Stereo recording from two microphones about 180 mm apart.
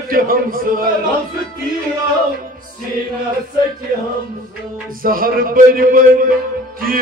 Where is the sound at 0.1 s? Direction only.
55° right (ahead or behind).